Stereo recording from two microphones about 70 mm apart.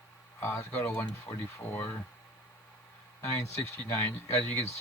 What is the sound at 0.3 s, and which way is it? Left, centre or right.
Speech, left.